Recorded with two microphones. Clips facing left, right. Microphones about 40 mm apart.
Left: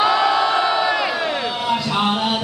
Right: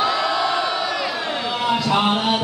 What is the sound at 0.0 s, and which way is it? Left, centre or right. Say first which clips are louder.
Crowd: left 4 dB; left.